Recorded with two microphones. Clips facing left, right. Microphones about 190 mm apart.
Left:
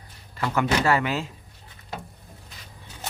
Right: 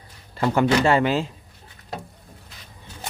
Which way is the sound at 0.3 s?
30° right (ahead or behind).